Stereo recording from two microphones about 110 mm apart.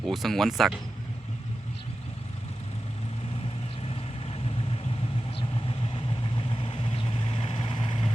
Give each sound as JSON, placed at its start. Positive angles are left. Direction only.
{"t": 0.0, "sound": "speech", "side_deg": 0}
{"t": 3.8, "sound": "vehicle", "side_deg": 65}
{"t": 5.9, "sound": "vehicle", "side_deg": 55}